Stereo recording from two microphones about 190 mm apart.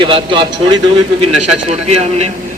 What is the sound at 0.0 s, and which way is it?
A man's voice, 25° right (ahead or behind).